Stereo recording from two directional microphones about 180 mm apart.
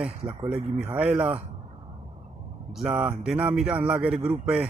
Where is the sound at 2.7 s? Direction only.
5° right (ahead or behind).